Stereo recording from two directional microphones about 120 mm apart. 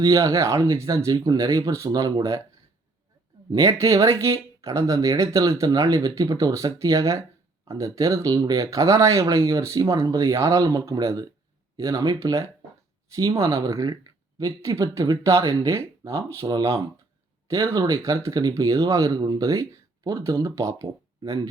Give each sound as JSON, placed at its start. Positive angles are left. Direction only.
{"t": 0.0, "sound": "speech", "side_deg": -30}
{"t": 3.5, "sound": "speech", "side_deg": -30}